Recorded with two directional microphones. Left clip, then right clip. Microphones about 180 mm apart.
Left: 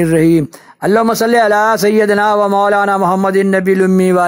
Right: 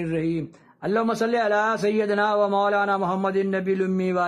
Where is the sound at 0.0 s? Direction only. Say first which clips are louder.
Left 15 dB; 40° left (ahead or behind).